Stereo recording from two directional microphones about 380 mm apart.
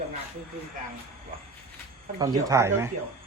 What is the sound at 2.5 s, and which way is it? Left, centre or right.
Speech, centre.